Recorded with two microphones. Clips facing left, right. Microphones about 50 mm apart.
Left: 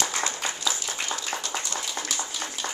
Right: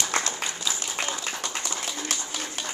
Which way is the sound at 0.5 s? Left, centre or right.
Centre.